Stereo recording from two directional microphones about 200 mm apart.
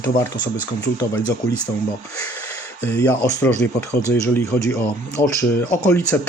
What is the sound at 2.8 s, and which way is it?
Speech, 10° left (ahead or behind).